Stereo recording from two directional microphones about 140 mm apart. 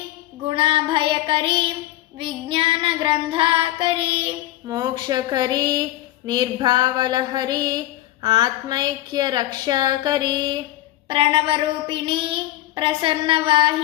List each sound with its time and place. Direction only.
0.4 s child singing: 40° right (ahead or behind)
4.6 s a woman's voice: 30° right (ahead or behind)